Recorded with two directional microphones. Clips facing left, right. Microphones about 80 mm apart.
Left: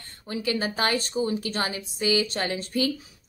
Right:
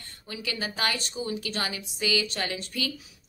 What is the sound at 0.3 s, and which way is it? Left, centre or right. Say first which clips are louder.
A woman's voice: left 7 dB; left.